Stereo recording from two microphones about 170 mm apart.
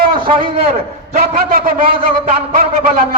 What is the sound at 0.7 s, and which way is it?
Speech, 40° right (ahead or behind).